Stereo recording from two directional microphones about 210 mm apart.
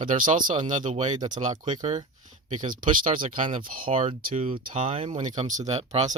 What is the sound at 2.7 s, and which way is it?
Speech, 40° right (ahead or behind).